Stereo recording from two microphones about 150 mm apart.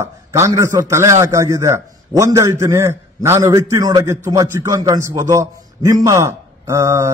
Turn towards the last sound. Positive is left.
turn(degrees=-20)  # may be behind; listen again after turning